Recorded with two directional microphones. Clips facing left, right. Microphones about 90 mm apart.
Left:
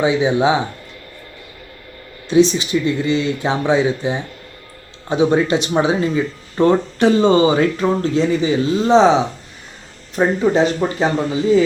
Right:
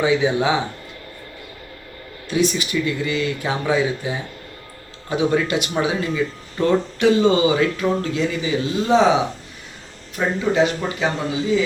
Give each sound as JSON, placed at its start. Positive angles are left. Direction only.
{"t": 0.0, "sound": "speech", "side_deg": 20}
{"t": 2.3, "sound": "speech", "side_deg": 25}
{"t": 10.2, "sound": "speech", "side_deg": 35}